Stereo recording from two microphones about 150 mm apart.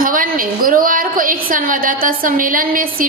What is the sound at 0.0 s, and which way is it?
A woman's voice, 70° right (ahead or behind).